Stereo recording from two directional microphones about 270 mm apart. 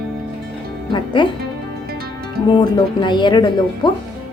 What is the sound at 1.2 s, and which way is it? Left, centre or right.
Speech, centre.